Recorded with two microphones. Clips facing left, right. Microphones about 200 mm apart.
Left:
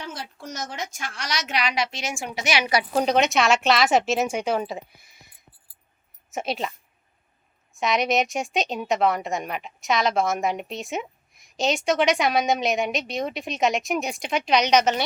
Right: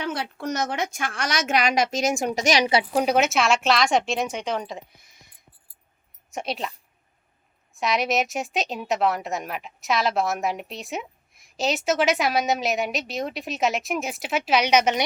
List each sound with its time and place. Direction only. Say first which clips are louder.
0.0 s a woman's voice: right 7 dB; 65° right (ahead or behind); by 2.6 s 40° right (ahead or behind)
2.9 s a woman's voice: left 4 dB; 10° right (ahead or behind)
6.3 s a woman's voice: left 2 dB; centre (ahead or behind)